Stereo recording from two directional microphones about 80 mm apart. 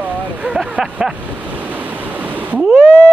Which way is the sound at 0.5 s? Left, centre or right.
Centre.